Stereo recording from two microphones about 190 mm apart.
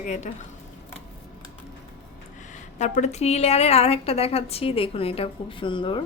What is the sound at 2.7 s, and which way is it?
A woman's voice, 40° left (ahead or behind).